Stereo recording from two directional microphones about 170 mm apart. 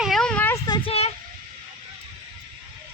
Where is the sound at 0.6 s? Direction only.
25° left (ahead or behind).